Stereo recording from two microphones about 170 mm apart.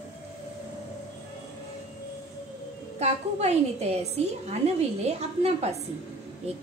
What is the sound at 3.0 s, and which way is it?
A woman's voice, 40° right (ahead or behind).